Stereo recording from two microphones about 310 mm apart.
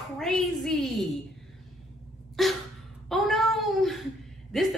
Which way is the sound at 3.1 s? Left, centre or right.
Centre.